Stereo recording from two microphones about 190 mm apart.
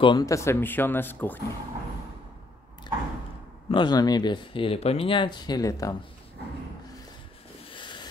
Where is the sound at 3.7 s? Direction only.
25° left (ahead or behind).